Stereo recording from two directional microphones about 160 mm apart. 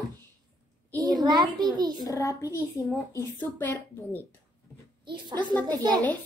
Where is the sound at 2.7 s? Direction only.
Centre (ahead or behind).